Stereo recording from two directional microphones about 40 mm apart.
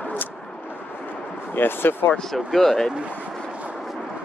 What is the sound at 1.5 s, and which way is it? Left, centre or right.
Speech, left.